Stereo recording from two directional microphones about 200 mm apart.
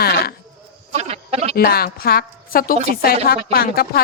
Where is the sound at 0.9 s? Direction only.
30° right (ahead or behind).